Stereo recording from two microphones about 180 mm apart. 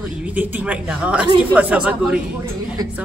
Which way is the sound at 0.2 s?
10° right (ahead or behind).